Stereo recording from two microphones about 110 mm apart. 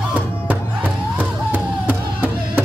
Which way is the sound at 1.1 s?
15° right (ahead or behind).